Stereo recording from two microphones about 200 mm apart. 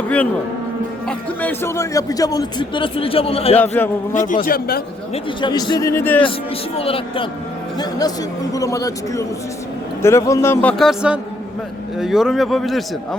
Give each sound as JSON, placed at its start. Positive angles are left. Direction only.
{"t": 1.0, "sound": "a man's voice", "side_deg": 10}
{"t": 4.1, "sound": "a man's voice", "side_deg": 40}
{"t": 5.1, "sound": "a man's voice", "side_deg": 20}
{"t": 5.9, "sound": "speech", "side_deg": 10}
{"t": 6.7, "sound": "a man's voice", "side_deg": 30}